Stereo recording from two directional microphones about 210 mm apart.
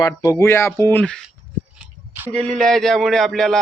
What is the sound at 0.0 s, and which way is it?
Speech, 15° left (ahead or behind).